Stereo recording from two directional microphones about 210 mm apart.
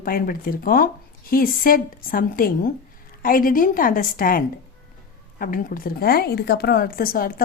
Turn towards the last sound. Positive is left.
turn(degrees=45)  # may be behind; listen again after turning